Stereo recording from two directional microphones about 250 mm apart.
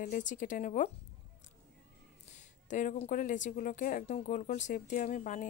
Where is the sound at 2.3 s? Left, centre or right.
Left.